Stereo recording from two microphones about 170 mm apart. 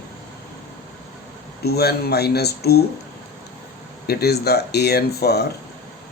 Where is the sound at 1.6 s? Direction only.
70° left (ahead or behind).